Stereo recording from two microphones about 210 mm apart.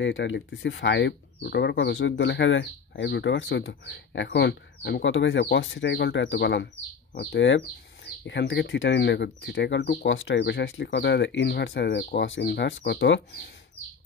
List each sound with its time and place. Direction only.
0.0 s speech: 60° left (ahead or behind)